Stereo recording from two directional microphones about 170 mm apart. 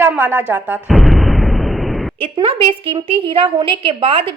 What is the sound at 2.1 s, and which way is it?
A woman's voice, 30° right (ahead or behind).